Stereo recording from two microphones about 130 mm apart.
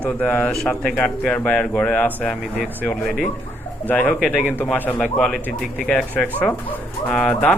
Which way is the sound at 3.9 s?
15° left (ahead or behind).